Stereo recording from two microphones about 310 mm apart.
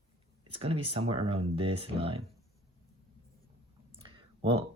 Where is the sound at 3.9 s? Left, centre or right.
Centre.